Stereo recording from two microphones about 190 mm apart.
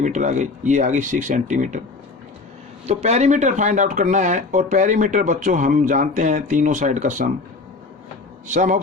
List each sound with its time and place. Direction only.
0.0 s speech: 40° right (ahead or behind)
2.8 s speech: 35° right (ahead or behind)
8.4 s speech: 40° right (ahead or behind)